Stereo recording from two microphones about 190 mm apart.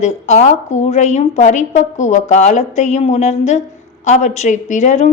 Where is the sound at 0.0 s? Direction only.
35° left (ahead or behind).